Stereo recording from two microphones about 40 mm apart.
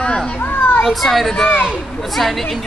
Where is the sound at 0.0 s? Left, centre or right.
Centre.